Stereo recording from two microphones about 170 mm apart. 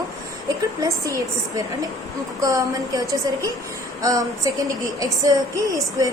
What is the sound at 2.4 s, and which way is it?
A woman's voice, 20° right (ahead or behind).